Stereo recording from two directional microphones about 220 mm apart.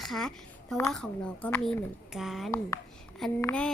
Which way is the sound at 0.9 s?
5° left (ahead or behind).